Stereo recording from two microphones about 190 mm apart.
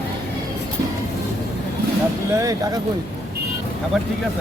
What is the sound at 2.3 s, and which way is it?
Speech, 15° right (ahead or behind).